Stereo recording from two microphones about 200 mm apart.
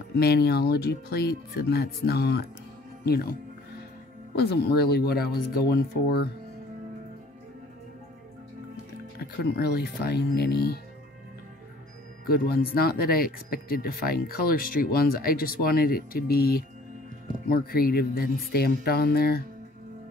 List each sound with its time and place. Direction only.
0.2 s speech: 55° left (ahead or behind)
4.4 s speech: 55° left (ahead or behind)
9.4 s speech: 50° left (ahead or behind)
12.3 s speech: 50° left (ahead or behind)